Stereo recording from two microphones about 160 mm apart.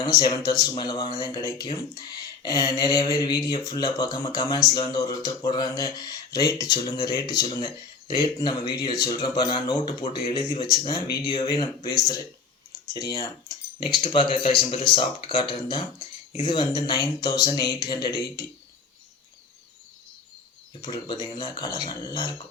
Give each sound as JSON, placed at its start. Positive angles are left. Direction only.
{"t": 0.0, "sound": "speech", "side_deg": 25}
{"t": 20.8, "sound": "speech", "side_deg": 25}